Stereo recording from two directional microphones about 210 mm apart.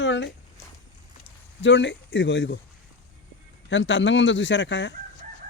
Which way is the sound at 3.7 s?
60° left (ahead or behind).